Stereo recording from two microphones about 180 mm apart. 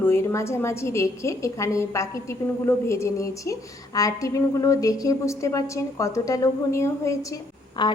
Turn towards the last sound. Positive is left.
turn(degrees=20)  # may be behind; listen again after turning